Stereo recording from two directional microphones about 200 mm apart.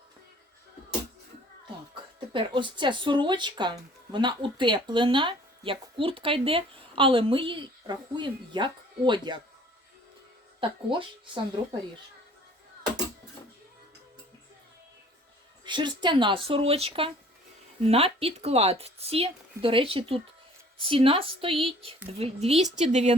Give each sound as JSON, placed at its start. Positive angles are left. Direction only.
{"t": 2.3, "sound": "speech", "side_deg": -25}
{"t": 10.6, "sound": "speech", "side_deg": -25}
{"t": 15.6, "sound": "speech", "side_deg": -20}